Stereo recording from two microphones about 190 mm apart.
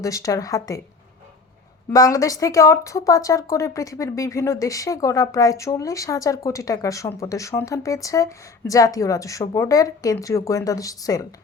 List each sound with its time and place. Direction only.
0.0 s speech: 15° left (ahead or behind)
1.9 s speech: 20° left (ahead or behind)